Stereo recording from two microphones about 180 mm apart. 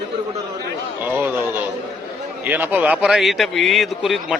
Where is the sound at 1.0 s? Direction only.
10° right (ahead or behind).